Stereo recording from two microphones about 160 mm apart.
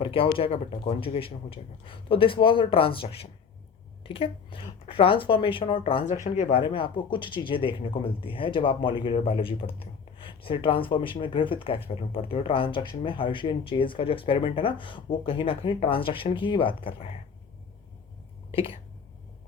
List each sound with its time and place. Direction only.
0.0 s speech: 35° left (ahead or behind)
6.2 s speech: 50° left (ahead or behind)
6.5 s speech: 30° left (ahead or behind)
18.5 s speech: 35° left (ahead or behind)